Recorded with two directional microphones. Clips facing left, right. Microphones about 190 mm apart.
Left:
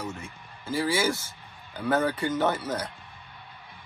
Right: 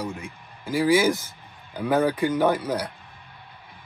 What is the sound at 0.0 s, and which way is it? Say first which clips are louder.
Speech: right 4 dB; 15° right (ahead or behind).